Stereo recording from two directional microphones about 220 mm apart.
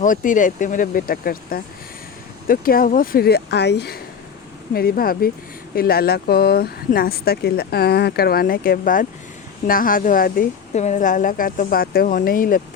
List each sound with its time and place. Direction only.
0.0 s a woman's voice: 35° left (ahead or behind)